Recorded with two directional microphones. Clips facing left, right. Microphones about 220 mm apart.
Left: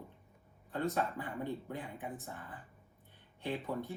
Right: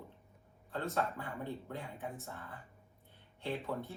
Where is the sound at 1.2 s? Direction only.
15° left (ahead or behind).